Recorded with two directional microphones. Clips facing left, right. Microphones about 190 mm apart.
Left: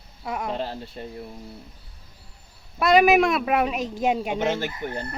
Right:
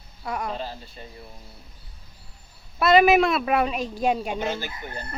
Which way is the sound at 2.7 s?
15° left (ahead or behind).